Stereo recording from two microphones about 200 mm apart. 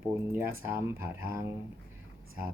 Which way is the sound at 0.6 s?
10° right (ahead or behind).